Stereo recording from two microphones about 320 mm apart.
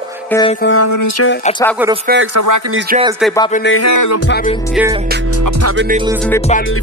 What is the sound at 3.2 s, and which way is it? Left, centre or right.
Music, centre.